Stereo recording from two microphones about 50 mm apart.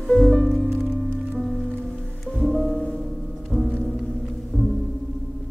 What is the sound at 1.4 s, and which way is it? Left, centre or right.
Music, centre.